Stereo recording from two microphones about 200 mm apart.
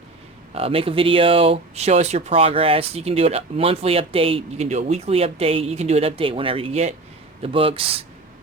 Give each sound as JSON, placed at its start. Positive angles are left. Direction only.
{"t": 0.5, "sound": "speech", "side_deg": -30}